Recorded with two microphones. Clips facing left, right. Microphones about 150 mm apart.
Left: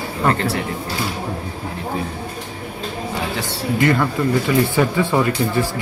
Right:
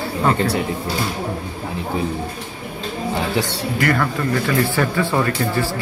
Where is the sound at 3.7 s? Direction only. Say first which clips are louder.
Left 2 dB; 20° left (ahead or behind).